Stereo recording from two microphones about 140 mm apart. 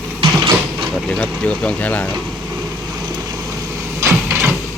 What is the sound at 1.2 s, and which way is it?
Speech, 10° left (ahead or behind).